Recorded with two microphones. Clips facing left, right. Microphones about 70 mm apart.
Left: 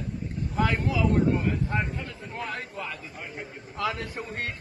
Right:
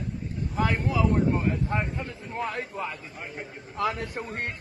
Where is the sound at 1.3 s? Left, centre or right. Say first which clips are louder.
Even; right.